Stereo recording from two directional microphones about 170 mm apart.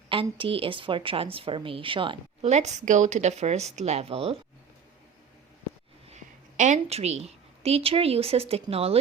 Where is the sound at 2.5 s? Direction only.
40° right (ahead or behind).